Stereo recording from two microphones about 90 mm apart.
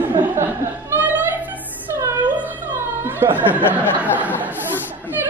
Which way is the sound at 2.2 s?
20° right (ahead or behind).